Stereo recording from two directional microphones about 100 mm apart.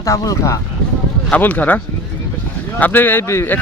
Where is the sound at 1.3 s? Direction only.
15° left (ahead or behind).